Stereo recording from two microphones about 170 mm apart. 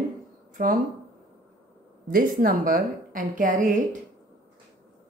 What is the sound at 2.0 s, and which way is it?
A woman's voice, 55° right (ahead or behind).